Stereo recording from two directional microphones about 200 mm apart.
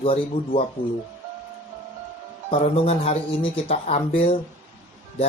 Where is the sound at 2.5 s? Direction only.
30° left (ahead or behind).